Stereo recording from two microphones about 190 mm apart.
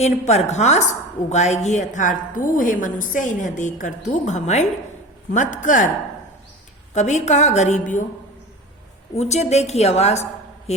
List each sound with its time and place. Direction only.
0.0 s a woman's voice: 35° left (ahead or behind)
6.9 s a woman's voice: 35° left (ahead or behind)
9.1 s a woman's voice: 35° left (ahead or behind)